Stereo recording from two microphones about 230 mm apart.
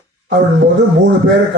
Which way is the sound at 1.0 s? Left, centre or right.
Right.